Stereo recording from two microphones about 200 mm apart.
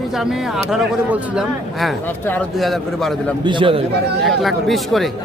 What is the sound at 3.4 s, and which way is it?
Speech, 25° right (ahead or behind).